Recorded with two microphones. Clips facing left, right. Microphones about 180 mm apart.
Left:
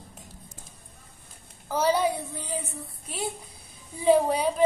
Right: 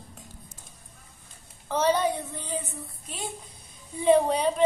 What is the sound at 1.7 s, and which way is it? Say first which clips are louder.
Speech: even; 10° left (ahead or behind).